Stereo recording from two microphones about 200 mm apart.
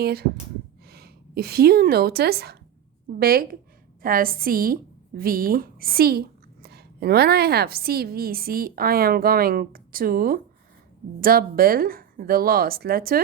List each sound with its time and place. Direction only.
0.0 s a woman's voice: 50° right (ahead or behind)